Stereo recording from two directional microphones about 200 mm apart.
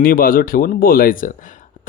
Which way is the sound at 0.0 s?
45° left (ahead or behind).